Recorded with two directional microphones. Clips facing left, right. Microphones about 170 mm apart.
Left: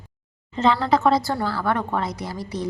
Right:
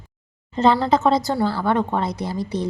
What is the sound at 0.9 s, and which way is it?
A woman's voice, 25° right (ahead or behind).